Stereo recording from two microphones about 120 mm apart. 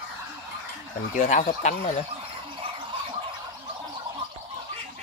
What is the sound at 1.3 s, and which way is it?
Speech, 75° left (ahead or behind).